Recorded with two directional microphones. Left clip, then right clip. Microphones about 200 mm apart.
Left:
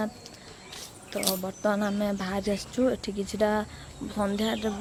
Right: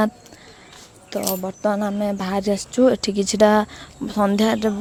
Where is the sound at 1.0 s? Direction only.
40° right (ahead or behind).